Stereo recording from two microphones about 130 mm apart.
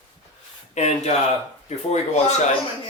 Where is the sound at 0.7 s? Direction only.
60° left (ahead or behind).